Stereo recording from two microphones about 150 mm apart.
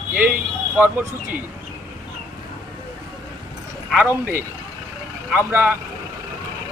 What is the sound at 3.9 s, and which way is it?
Speech, 10° right (ahead or behind).